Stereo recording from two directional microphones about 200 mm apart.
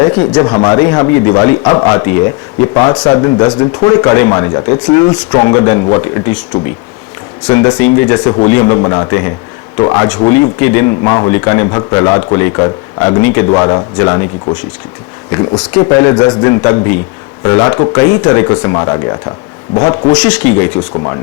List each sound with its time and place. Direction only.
0.0 s speech: 20° left (ahead or behind)
6.5 s a man's voice: 30° left (ahead or behind)
7.4 s speech: 15° left (ahead or behind)
15.3 s a man's voice: 20° left (ahead or behind)
20.1 s speech: 5° left (ahead or behind)